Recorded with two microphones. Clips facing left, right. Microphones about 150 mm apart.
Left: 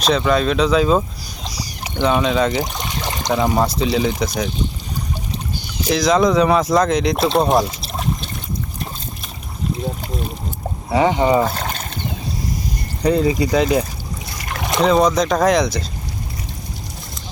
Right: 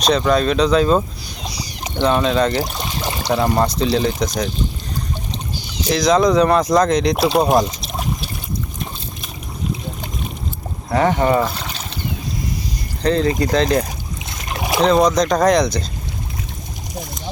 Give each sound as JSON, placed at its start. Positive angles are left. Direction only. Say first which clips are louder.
{"t": 0.0, "sound": "speech", "louder": "right 1 dB", "side_deg": 0}
{"t": 2.8, "sound": "a sound", "louder": "right 1 dB", "side_deg": -15}
{"t": 3.3, "sound": "speech", "louder": "even", "side_deg": 0}
{"t": 5.9, "sound": "speech", "louder": "right 1 dB", "side_deg": 0}
{"t": 7.6, "sound": "trickle", "louder": "even", "side_deg": -5}
{"t": 10.8, "sound": "speech", "louder": "even", "side_deg": 15}
{"t": 11.4, "sound": "boat", "louder": "left 3 dB", "side_deg": 50}
{"t": 13.0, "sound": "speech", "louder": "left 1 dB", "side_deg": 10}